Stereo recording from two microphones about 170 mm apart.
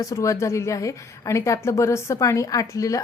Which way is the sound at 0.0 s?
20° left (ahead or behind).